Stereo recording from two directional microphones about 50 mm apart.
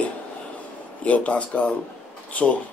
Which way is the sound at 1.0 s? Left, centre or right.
Left.